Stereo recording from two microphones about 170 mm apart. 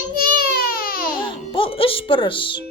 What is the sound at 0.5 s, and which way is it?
Baby cry, 60° left (ahead or behind).